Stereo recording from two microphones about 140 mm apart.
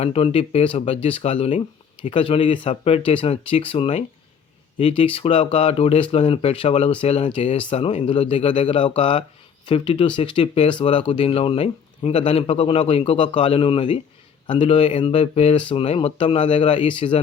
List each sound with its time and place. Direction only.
0.0 s speech: 45° left (ahead or behind)